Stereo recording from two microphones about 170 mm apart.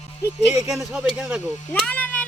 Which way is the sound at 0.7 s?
Centre (ahead or behind).